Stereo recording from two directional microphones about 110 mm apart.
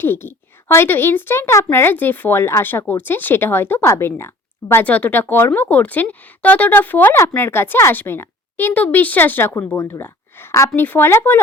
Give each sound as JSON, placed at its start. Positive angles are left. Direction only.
{"t": 0.0, "sound": "a woman's voice", "side_deg": 20}